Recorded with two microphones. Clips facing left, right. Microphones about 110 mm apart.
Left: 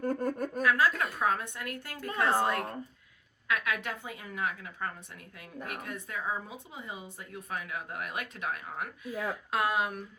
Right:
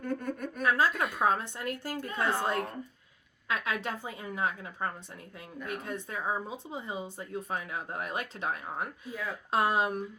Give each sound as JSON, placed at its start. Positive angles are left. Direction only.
{"t": 0.0, "sound": "a sound", "side_deg": 40}
{"t": 0.6, "sound": "speech", "side_deg": -30}
{"t": 2.2, "sound": "a woman's voice", "side_deg": 30}
{"t": 3.5, "sound": "speech", "side_deg": -30}